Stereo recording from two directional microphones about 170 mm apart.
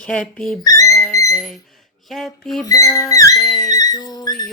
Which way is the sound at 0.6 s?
20° left (ahead or behind).